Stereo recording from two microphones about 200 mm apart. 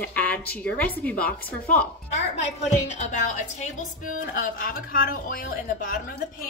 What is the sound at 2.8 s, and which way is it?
A woman's voice, 35° left (ahead or behind).